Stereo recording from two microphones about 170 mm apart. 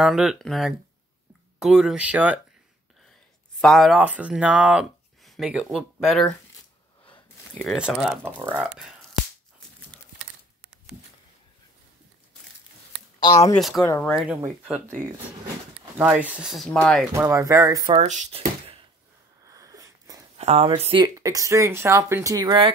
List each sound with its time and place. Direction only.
0.0 s speech: 5° right (ahead or behind)
3.6 s speech: centre (ahead or behind)
7.1 s a sound: 10° left (ahead or behind)
7.7 s speech: 5° right (ahead or behind)
13.6 s speech: centre (ahead or behind)
13.8 s speech: 15° left (ahead or behind)
14.1 s speech: 5° right (ahead or behind)
16.0 s speech: 10° right (ahead or behind)
17.1 s speech: 15° right (ahead or behind)
17.9 s speech: 45° right (ahead or behind)
19.4 s wheeze: 20° right (ahead or behind)
20.3 s speech: 40° right (ahead or behind)